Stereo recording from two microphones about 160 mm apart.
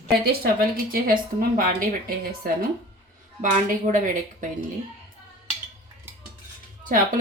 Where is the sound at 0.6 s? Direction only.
65° right (ahead or behind).